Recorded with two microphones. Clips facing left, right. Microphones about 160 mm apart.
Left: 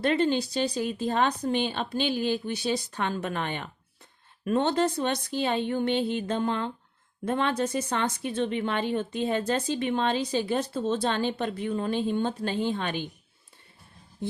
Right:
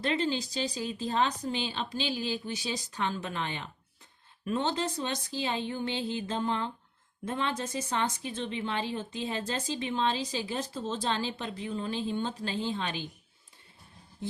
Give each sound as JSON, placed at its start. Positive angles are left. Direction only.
{"t": 0.0, "sound": "a woman's voice", "side_deg": 55}